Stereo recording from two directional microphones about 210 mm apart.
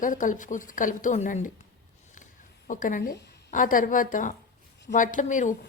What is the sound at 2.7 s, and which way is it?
A woman's voice, 40° left (ahead or behind).